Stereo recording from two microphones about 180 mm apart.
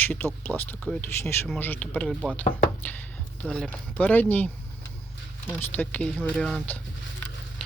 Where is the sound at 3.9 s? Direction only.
10° left (ahead or behind).